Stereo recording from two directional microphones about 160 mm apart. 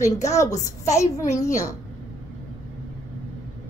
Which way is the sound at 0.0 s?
20° left (ahead or behind).